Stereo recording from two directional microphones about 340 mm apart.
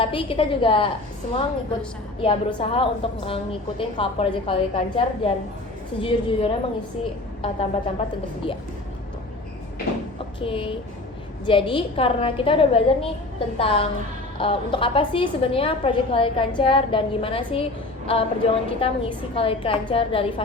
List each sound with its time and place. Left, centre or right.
0.0 s a woman's voice: centre
2.2 s a woman's voice: centre
10.4 s a woman's voice: centre